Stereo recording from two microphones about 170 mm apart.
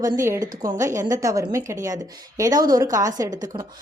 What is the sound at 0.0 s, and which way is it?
A woman's voice, 20° right (ahead or behind).